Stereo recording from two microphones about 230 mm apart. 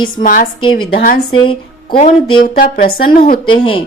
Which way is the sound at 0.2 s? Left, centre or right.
Left.